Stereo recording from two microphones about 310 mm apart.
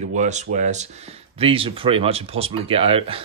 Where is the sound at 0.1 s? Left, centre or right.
Right.